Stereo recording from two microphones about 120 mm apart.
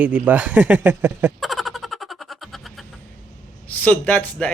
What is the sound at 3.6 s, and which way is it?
Speech, 15° left (ahead or behind).